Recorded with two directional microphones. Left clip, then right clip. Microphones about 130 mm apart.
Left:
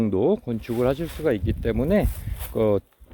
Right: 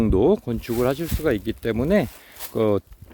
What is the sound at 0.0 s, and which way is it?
Speech, 40° right (ahead or behind).